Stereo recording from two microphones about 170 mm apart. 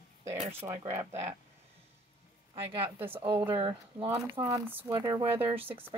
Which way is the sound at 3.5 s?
30° right (ahead or behind).